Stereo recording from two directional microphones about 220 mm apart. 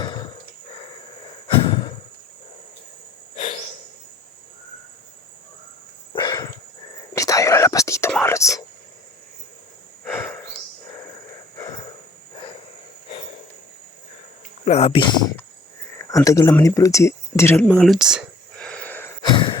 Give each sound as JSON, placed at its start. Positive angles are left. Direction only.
{"t": 0.0, "sound": "a sound", "side_deg": 20}
{"t": 6.1, "sound": "dog", "side_deg": 15}
{"t": 7.1, "sound": "whispering", "side_deg": 15}
{"t": 10.0, "sound": "a sound", "side_deg": 10}
{"t": 14.6, "sound": "speech", "side_deg": 30}
{"t": 16.2, "sound": "speech", "side_deg": 15}
{"t": 18.6, "sound": "gasp", "side_deg": 5}